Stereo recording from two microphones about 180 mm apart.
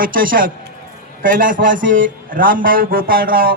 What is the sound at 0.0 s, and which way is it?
A man's voice, 50° right (ahead or behind).